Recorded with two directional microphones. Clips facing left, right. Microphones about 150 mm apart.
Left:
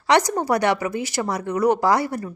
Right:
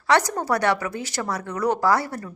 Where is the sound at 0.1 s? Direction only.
15° left (ahead or behind).